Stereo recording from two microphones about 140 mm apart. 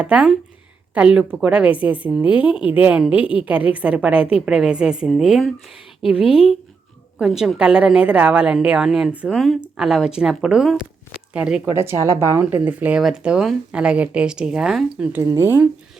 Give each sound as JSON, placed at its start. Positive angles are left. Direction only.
{"t": 0.0, "sound": "speech", "side_deg": -10}
{"t": 2.4, "sound": "speech", "side_deg": 35}
{"t": 2.6, "sound": "a woman's voice", "side_deg": -10}
{"t": 11.6, "sound": "speech", "side_deg": -20}
{"t": 15.2, "sound": "speech", "side_deg": -15}